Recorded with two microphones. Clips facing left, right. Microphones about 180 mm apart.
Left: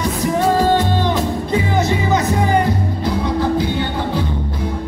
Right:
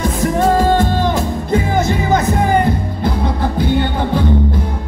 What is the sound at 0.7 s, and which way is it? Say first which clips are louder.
Music: right 2 dB; 50° right (ahead or behind).